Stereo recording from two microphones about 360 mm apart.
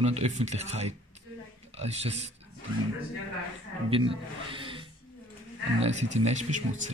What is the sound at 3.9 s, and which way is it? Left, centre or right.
Speech, centre.